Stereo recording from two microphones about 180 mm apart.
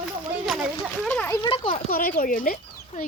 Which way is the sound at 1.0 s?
10° left (ahead or behind).